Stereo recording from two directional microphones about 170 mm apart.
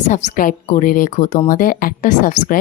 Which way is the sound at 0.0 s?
50° left (ahead or behind).